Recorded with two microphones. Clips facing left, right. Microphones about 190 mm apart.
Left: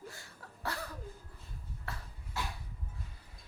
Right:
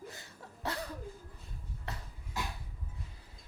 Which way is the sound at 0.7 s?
20° right (ahead or behind).